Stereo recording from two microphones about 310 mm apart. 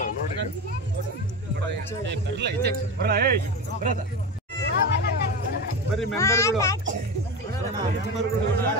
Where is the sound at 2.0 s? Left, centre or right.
Right.